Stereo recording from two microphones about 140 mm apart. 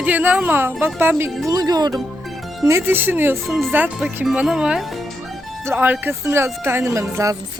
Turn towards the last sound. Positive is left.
turn(degrees=-20)  # may be behind; listen again after turning